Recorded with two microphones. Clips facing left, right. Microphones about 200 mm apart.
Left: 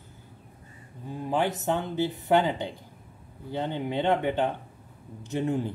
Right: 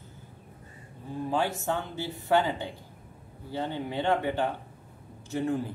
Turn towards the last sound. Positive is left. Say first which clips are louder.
# left 1 dB
turn(degrees=20)  # may be behind; listen again after turning